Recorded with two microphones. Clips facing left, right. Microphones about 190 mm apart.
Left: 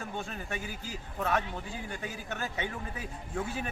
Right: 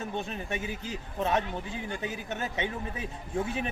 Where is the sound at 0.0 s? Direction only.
20° right (ahead or behind).